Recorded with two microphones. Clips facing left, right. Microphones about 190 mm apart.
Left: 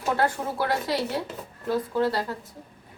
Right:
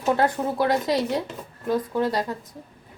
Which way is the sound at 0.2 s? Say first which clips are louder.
Right 4 dB; 20° right (ahead or behind).